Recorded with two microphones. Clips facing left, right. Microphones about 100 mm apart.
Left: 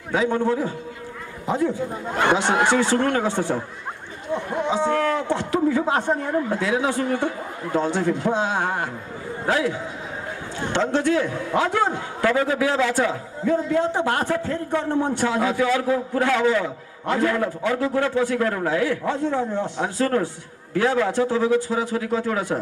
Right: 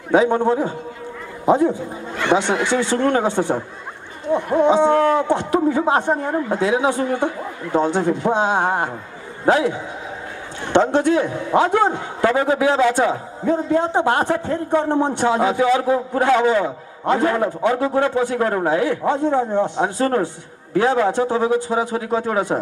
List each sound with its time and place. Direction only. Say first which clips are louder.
0.1 s a man's voice: right 5 dB; 20° right (ahead or behind)
2.4 s speech: left 1 dB; 45° left (ahead or behind)
3.1 s a man's voice: right 4 dB; 20° right (ahead or behind)